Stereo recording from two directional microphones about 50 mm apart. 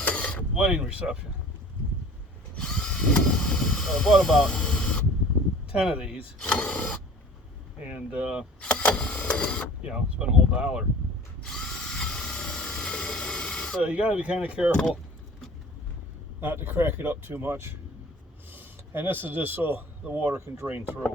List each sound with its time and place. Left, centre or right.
0.0 s mechanisms: left
0.5 s speech: centre
2.6 s speech: centre
4.5 s radio: centre
5.8 s speech: centre
6.4 s speech: left
7.9 s speech: right
8.6 s power windows: left
9.3 s speech: centre
9.8 s speech: centre
11.4 s tools: centre
13.8 s speech: right
14.7 s speech: centre
16.4 s speech: right